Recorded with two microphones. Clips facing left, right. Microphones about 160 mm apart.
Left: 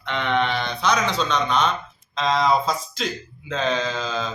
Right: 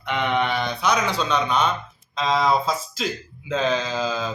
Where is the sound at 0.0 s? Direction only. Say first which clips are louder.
Even; 10° right (ahead or behind).